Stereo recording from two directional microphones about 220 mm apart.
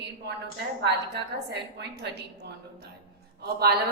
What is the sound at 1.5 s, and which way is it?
A woman's voice, 50° right (ahead or behind).